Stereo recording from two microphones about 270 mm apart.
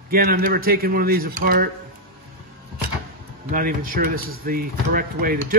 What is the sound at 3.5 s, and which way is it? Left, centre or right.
Speech, right.